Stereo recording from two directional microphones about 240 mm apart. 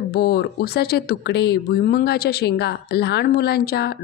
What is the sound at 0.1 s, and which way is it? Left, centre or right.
Speech, left.